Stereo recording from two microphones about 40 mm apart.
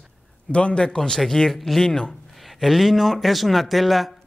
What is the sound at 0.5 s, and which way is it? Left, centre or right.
A man's voice, left.